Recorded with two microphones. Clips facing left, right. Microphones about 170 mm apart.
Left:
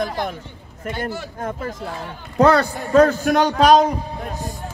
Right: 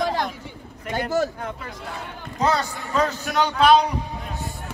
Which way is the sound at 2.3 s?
60° left (ahead or behind).